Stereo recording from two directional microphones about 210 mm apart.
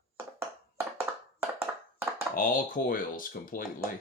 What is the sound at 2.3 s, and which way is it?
Speech, 40° left (ahead or behind).